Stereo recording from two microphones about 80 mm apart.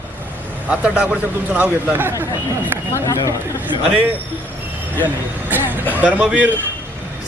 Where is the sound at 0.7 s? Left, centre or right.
Centre.